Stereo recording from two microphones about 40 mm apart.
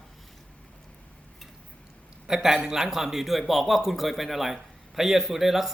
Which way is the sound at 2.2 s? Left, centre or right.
Centre.